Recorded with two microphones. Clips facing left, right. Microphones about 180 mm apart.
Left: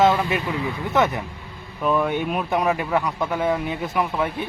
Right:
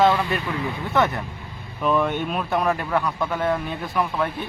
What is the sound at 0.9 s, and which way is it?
Speech, 15° left (ahead or behind).